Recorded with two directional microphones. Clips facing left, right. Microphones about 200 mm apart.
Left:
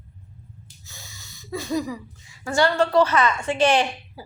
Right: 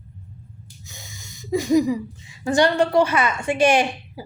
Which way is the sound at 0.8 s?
15° right (ahead or behind).